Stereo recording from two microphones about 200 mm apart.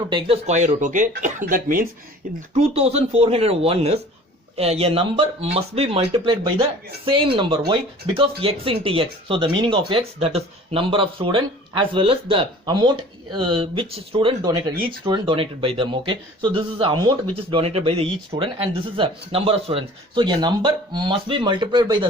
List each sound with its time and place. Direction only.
0.1 s speech: 25° right (ahead or behind); by 1.9 s 45° right (ahead or behind)
2.6 s speech: 30° right (ahead or behind)